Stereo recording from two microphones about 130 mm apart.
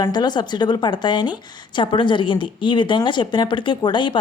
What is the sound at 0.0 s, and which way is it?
A woman's voice, 30° left (ahead or behind).